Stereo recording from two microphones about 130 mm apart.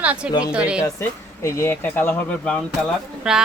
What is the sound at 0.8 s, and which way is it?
Speech, 20° left (ahead or behind).